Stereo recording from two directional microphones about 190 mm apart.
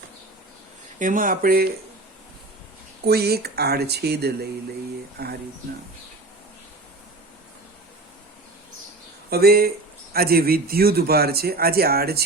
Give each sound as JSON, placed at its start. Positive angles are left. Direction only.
{"t": 0.9, "sound": "speech", "side_deg": -45}
{"t": 3.1, "sound": "speech", "side_deg": -55}
{"t": 9.3, "sound": "speech", "side_deg": -55}